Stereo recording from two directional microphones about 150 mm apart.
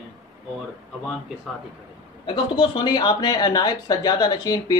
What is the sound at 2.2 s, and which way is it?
Speech, 30° left (ahead or behind).